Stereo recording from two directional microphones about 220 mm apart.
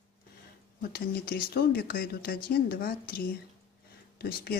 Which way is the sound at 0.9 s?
45° left (ahead or behind).